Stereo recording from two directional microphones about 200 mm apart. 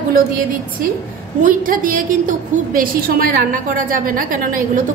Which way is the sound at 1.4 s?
45° right (ahead or behind).